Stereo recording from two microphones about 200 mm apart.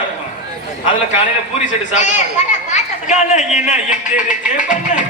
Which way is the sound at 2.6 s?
35° left (ahead or behind).